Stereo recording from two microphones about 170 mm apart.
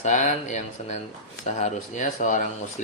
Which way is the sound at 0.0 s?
45° left (ahead or behind).